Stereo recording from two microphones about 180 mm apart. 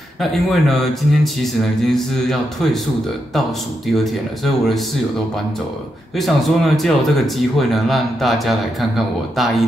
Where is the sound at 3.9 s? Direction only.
Centre (ahead or behind).